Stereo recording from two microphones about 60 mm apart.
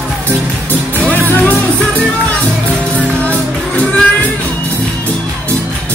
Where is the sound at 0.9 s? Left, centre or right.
Left.